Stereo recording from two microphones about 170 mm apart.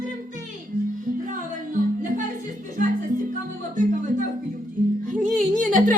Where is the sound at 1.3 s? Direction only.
50° right (ahead or behind).